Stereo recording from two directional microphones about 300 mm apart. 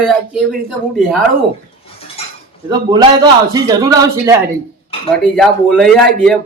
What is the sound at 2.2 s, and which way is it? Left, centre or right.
Cutlery, centre.